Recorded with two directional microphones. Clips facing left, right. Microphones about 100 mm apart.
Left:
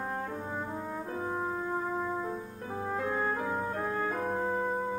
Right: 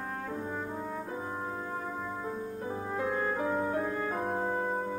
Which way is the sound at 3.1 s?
10° left (ahead or behind).